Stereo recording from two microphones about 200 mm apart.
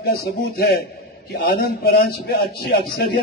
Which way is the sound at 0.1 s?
50° left (ahead or behind).